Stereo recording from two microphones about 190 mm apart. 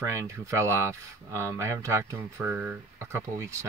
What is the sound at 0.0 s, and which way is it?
Speech, 15° right (ahead or behind).